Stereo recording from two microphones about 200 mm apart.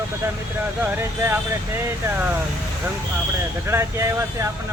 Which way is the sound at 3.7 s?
10° right (ahead or behind).